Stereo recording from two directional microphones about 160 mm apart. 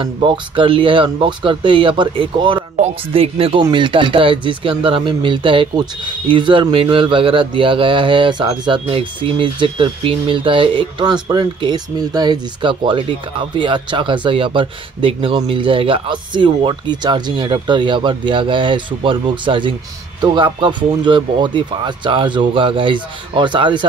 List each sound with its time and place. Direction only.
0.0 s speech: 30° right (ahead or behind)